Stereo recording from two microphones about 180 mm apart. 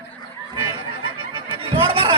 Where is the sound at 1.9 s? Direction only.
30° right (ahead or behind).